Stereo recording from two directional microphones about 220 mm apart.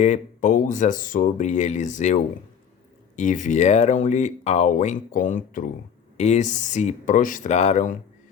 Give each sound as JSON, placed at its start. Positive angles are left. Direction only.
{"t": 0.0, "sound": "speech", "side_deg": 35}